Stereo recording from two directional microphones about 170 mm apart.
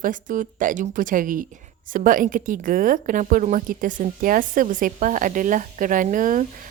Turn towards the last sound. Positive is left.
turn(degrees=-50)  # may be behind; listen again after turning